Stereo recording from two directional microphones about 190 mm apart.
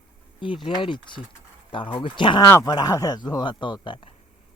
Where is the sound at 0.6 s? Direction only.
25° left (ahead or behind).